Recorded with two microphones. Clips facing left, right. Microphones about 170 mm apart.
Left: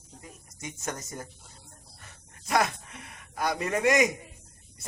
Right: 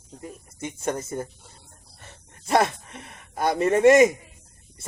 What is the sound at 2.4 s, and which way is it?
Speech, 30° right (ahead or behind).